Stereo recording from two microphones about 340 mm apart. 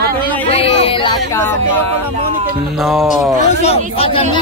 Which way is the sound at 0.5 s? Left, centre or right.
Centre.